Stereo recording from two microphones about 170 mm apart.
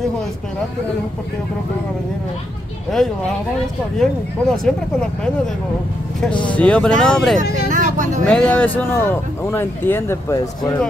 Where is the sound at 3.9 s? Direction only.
Centre (ahead or behind).